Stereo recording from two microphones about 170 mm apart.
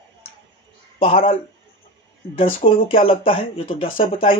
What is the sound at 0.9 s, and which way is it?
Speech, 35° left (ahead or behind).